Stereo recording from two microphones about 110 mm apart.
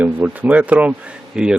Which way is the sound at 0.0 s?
15° right (ahead or behind).